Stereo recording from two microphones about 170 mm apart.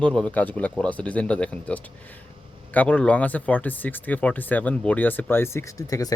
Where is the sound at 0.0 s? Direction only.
5° left (ahead or behind).